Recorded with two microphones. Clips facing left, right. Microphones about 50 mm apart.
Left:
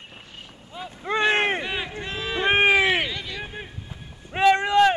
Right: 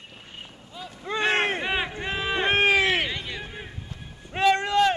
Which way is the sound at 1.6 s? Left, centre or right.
Right.